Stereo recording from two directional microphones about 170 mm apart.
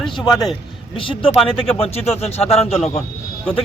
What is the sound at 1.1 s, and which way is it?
Speech, 30° left (ahead or behind).